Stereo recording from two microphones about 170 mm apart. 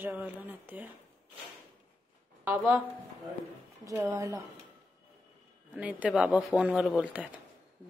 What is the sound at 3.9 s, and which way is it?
Speech, 15° right (ahead or behind).